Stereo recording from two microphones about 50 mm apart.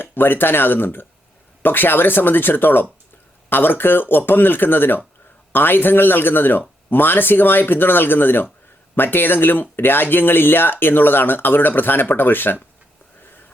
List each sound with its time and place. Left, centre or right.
0.0 s speech: left